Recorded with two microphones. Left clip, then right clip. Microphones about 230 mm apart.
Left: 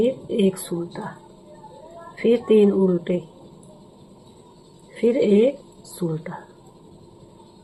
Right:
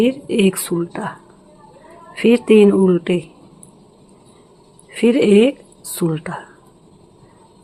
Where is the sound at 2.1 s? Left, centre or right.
Right.